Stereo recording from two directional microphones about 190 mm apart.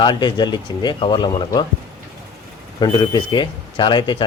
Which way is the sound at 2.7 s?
25° left (ahead or behind).